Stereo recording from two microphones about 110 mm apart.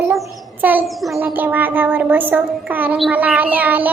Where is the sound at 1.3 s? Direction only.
15° right (ahead or behind).